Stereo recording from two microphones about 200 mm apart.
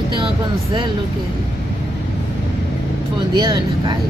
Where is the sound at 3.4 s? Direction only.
20° right (ahead or behind).